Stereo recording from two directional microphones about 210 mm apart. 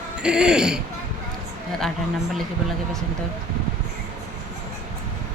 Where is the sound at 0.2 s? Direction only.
5° right (ahead or behind).